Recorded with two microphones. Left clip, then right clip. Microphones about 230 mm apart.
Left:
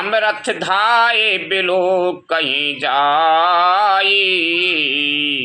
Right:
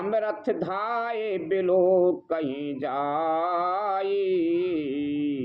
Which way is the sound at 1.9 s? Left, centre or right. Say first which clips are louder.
Left 5 dB; left.